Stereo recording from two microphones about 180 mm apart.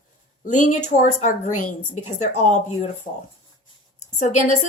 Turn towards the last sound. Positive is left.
turn(degrees=40)  # may be behind; listen again after turning